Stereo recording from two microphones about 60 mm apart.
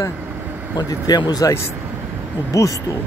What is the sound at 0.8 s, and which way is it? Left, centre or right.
Speech, left.